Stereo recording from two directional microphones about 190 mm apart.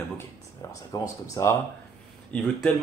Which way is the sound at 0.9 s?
15° left (ahead or behind).